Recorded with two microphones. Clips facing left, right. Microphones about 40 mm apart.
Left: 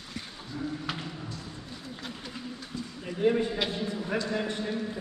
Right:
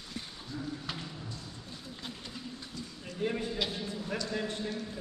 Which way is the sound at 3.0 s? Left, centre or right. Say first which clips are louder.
Left 8 dB; left.